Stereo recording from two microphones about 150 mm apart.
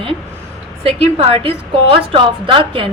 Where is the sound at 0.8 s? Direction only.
40° right (ahead or behind).